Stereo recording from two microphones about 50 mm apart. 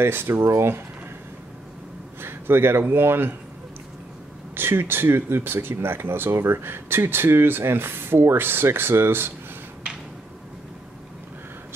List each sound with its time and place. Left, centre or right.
0.0 s speech: right
2.2 s speech: right
4.6 s speech: right